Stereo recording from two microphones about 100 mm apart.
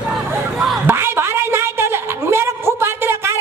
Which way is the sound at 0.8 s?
25° right (ahead or behind).